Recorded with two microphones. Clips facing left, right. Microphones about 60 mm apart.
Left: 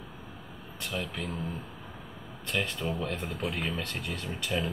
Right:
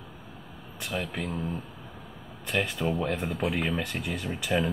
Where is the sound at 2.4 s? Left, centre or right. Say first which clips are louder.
Right 4 dB; centre.